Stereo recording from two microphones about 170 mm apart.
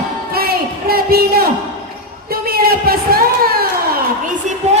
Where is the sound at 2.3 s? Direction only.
65° right (ahead or behind).